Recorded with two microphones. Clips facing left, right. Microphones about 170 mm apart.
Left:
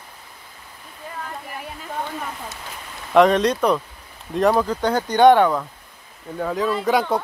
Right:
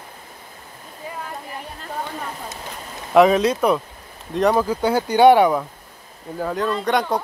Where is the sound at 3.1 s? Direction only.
5° right (ahead or behind).